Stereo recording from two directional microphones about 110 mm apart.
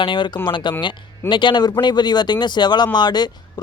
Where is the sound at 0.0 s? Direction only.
50° left (ahead or behind).